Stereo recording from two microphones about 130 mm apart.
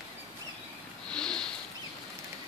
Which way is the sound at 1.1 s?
5° left (ahead or behind).